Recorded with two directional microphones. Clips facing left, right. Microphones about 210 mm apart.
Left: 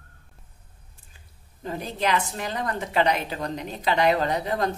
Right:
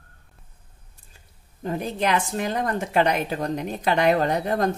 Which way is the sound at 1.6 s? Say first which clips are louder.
Right 3 dB; 50° right (ahead or behind).